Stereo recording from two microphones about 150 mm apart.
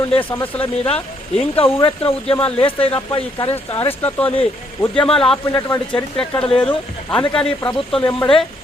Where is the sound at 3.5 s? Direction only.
15° left (ahead or behind).